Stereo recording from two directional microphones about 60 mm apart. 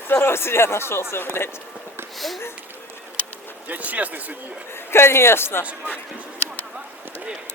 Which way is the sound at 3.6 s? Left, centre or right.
Right.